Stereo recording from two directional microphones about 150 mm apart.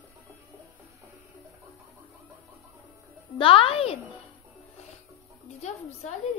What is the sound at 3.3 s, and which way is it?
Speech, 35° left (ahead or behind).